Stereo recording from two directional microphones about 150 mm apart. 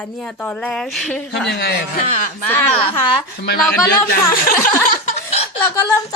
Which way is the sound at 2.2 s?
60° left (ahead or behind).